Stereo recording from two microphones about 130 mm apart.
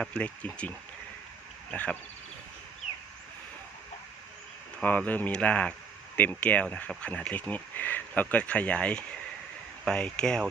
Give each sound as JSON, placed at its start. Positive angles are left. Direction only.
{"t": 0.0, "sound": "speech", "side_deg": 10}
{"t": 1.7, "sound": "speech", "side_deg": 10}
{"t": 4.8, "sound": "speech", "side_deg": 10}